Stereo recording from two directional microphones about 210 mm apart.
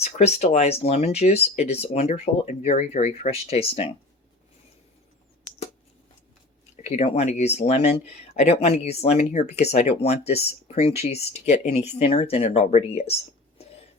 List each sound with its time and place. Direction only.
0.0 s speech: 30° left (ahead or behind)
6.8 s speech: 30° left (ahead or behind)